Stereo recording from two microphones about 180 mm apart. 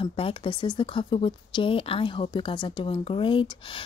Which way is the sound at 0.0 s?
30° left (ahead or behind).